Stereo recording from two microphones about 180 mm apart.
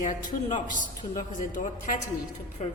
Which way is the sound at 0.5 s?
45° left (ahead or behind).